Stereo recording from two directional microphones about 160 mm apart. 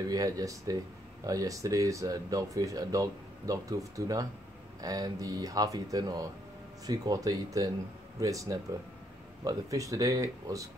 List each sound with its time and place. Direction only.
0.1 s speech: 20° right (ahead or behind)